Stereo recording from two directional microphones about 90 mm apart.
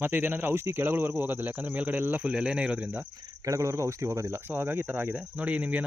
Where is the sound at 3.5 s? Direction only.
35° right (ahead or behind); by 5.8 s 15° right (ahead or behind).